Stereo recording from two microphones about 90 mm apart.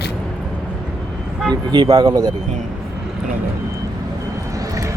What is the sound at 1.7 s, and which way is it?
Speech, 50° right (ahead or behind).